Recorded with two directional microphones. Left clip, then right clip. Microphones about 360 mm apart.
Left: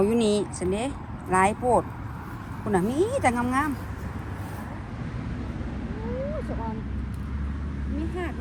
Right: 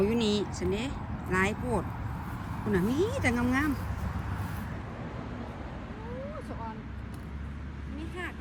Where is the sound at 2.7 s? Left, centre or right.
Centre.